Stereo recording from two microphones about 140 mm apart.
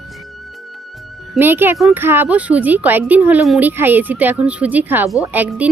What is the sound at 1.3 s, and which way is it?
A woman's voice, 15° right (ahead or behind).